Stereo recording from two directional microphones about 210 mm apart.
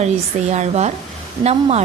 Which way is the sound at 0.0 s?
30° right (ahead or behind).